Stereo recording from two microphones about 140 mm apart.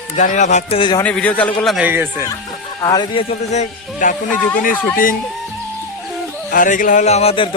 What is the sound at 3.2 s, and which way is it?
Music, 50° left (ahead or behind).